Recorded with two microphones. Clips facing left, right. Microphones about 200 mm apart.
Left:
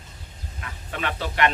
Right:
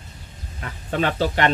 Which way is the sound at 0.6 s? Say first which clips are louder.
Right 8 dB; 35° right (ahead or behind).